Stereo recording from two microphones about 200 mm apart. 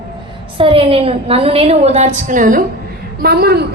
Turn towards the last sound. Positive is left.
turn(degrees=-55)  # may be behind; listen again after turning